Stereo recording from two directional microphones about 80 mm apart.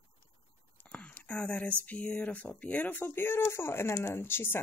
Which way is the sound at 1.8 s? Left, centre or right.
Centre.